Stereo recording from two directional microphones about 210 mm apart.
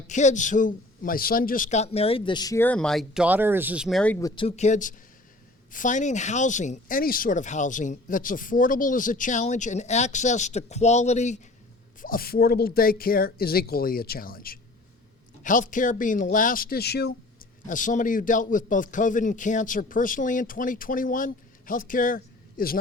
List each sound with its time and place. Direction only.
0.1 s a man's voice: 35° left (ahead or behind); by 4.4 s 15° left (ahead or behind)
4.4 s speech: 35° left (ahead or behind)
12.0 s speech: 45° left (ahead or behind)
17.7 s speech: 40° left (ahead or behind)